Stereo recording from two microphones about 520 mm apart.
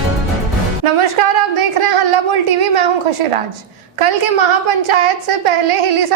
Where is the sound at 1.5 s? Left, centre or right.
Right.